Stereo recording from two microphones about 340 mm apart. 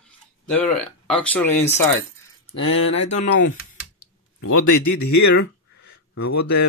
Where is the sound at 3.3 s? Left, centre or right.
Left.